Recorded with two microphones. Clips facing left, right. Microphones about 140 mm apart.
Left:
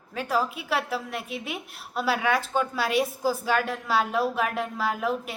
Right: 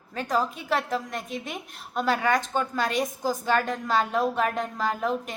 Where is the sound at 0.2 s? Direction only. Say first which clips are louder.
Even; 5° left (ahead or behind).